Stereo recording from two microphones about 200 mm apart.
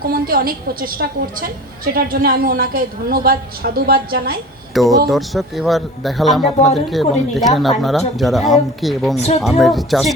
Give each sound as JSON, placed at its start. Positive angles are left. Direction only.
{"t": 0.0, "sound": "a woman's voice", "side_deg": -45}
{"t": 4.7, "sound": "a man's voice", "side_deg": 0}
{"t": 9.1, "sound": "speech", "side_deg": 30}
{"t": 9.4, "sound": "a man's voice", "side_deg": 0}